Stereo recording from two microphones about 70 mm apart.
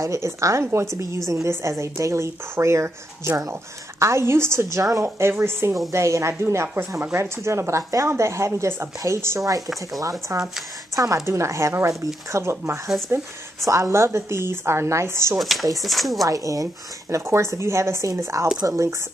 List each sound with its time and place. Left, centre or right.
0.0 s a woman's voice: right
5.0 s speech: right
5.9 s speech: right
10.3 s speech: right
11.2 s a woman's voice: right
15.3 s speech: centre
16.3 s speech: right
17.1 s a woman's voice: right